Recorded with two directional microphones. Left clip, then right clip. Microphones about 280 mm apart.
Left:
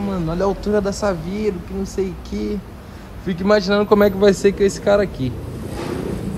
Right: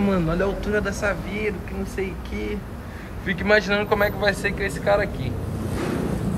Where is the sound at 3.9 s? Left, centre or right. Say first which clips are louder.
Left 9 dB; left.